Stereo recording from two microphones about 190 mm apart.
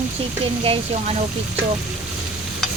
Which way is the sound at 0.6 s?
30° right (ahead or behind).